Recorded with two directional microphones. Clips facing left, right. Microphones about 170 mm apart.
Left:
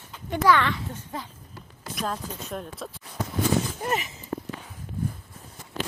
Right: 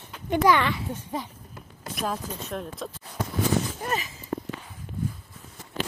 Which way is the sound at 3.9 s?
25° left (ahead or behind).